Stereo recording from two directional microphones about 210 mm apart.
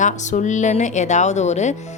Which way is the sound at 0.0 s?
35° left (ahead or behind).